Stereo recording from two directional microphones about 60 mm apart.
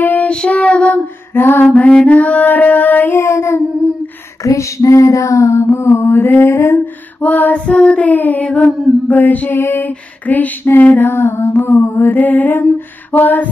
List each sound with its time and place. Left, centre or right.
0.0 s child singing: left
0.3 s female singing: centre
1.3 s female singing: left
3.2 s humming: left
4.5 s child singing: left
5.8 s humming: left
6.1 s mantra: left
7.2 s female singing: left
9.6 s mantra: left
10.2 s female singing: left
11.1 s humming: left
11.8 s mantra: left
13.2 s female singing: left